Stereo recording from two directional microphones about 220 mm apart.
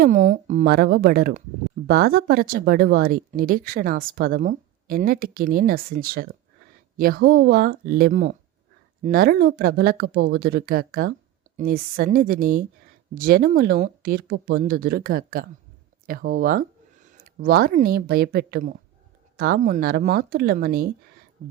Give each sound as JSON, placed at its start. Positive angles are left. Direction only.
{"t": 0.0, "sound": "speech", "side_deg": -40}